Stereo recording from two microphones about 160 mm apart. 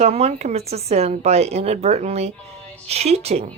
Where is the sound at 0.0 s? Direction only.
40° right (ahead or behind).